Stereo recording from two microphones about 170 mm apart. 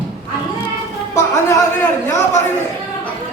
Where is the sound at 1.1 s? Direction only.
15° left (ahead or behind).